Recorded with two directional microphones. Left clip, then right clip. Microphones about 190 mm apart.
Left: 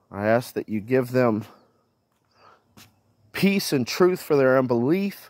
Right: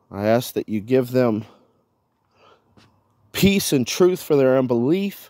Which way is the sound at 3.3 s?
70° right (ahead or behind).